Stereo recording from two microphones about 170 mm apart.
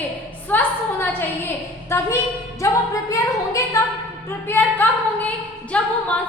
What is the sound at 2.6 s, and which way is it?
Singing, 20° left (ahead or behind).